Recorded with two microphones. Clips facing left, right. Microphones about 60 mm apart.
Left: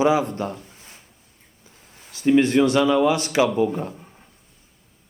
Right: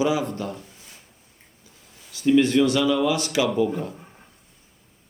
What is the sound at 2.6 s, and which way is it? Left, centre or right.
Speech, left.